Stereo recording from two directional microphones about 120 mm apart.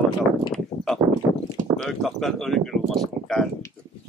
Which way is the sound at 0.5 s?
5° left (ahead or behind).